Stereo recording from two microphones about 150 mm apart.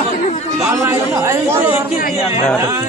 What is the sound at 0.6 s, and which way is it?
Speech, 20° right (ahead or behind).